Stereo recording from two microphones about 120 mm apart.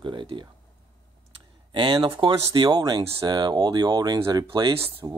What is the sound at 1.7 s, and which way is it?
Speech, 45° right (ahead or behind).